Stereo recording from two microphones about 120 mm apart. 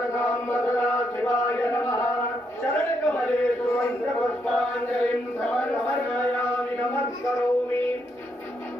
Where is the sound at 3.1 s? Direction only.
10° left (ahead or behind).